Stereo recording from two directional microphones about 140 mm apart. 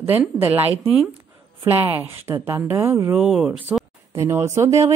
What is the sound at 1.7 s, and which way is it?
A woman's voice, 15° right (ahead or behind).